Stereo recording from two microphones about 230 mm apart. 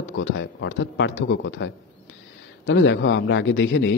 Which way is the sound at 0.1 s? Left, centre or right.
Left.